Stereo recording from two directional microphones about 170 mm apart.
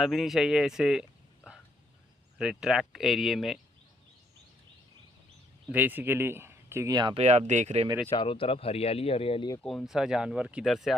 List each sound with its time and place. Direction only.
0.0 s speech: centre (ahead or behind)
2.4 s speech: 5° right (ahead or behind)
5.6 s speech: 10° right (ahead or behind)
7.2 s speech: 40° right (ahead or behind)
8.1 s speech: 30° left (ahead or behind)
9.6 s speech: centre (ahead or behind)